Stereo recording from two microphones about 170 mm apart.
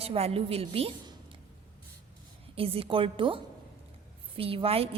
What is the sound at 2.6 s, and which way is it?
A woman's voice, 35° right (ahead or behind).